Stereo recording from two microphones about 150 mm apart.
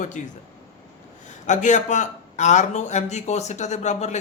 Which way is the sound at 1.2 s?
55° left (ahead or behind).